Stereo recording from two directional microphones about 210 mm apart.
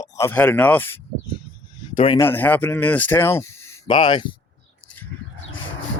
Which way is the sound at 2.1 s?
10° left (ahead or behind).